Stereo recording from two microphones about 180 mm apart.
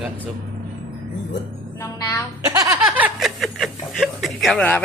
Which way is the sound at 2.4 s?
20° right (ahead or behind).